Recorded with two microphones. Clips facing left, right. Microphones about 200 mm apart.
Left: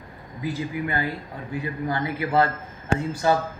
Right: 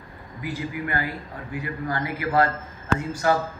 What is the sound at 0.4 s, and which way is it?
A man's voice, 20° left (ahead or behind).